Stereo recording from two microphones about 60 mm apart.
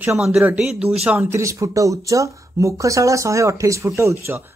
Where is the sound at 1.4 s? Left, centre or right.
Right.